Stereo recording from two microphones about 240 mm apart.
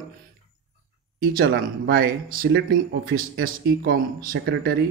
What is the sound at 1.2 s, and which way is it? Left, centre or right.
Speech, right.